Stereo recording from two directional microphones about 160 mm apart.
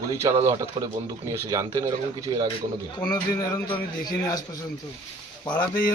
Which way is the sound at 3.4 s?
15° left (ahead or behind).